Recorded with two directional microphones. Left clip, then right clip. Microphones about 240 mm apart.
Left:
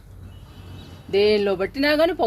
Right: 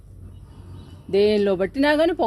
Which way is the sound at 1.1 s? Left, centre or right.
Right.